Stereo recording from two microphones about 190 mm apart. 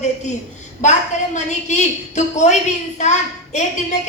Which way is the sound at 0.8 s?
40° left (ahead or behind).